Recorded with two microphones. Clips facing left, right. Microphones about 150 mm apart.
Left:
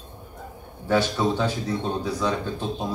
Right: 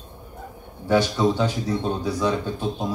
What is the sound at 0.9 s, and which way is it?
Speech, 15° right (ahead or behind).